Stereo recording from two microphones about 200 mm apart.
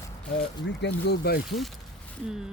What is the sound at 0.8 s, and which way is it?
Speech, 55° left (ahead or behind).